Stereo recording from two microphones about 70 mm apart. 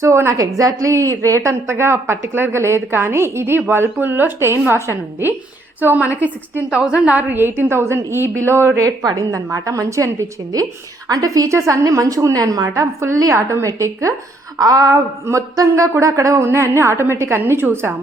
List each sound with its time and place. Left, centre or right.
0.6 s a woman's voice: right
8.8 s a woman's voice: right
11.7 s a woman's voice: right
13.1 s a woman's voice: right
13.5 s a woman's voice: right
14.6 s a woman's voice: right
15.3 s a woman's voice: right